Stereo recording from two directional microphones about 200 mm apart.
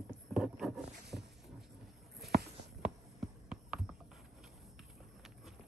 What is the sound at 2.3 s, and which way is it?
Walk, 55° right (ahead or behind).